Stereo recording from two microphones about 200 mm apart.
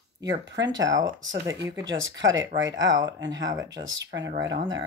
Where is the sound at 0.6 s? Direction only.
20° right (ahead or behind).